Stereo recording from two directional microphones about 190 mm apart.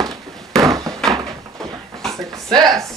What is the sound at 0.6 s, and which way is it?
Wood, 15° right (ahead or behind).